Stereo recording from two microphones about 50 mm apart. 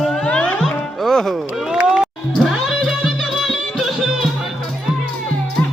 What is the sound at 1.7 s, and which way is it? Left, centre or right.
Run, centre.